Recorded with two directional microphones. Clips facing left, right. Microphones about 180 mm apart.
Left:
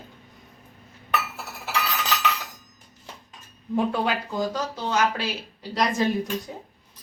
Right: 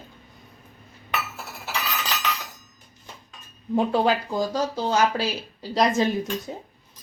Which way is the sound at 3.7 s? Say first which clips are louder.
Right 3 dB; 35° right (ahead or behind).